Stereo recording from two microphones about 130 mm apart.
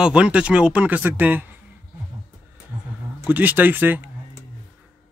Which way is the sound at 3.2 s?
15° right (ahead or behind).